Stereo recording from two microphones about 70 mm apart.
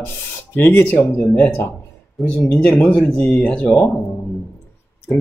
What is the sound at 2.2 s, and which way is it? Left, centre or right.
Speech, left.